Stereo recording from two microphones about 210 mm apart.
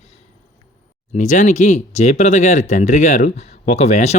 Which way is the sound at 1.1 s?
35° left (ahead or behind).